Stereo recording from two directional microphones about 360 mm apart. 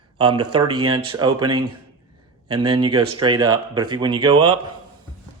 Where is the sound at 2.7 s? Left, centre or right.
Centre.